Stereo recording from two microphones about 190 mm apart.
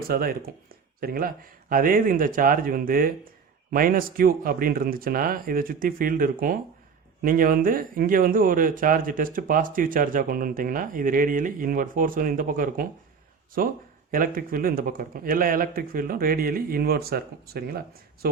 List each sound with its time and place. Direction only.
0.1 s speech: 50° right (ahead or behind)